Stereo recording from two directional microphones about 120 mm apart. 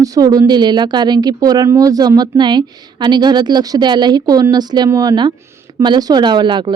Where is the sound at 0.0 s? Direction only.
30° right (ahead or behind).